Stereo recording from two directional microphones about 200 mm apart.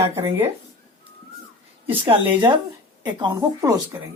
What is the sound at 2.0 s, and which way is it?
Speech, 25° right (ahead or behind).